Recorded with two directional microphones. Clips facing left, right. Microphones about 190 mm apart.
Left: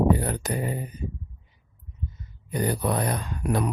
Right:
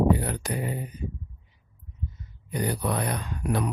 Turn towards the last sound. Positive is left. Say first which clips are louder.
# left 2 dB
turn(degrees=45)  # may be behind; listen again after turning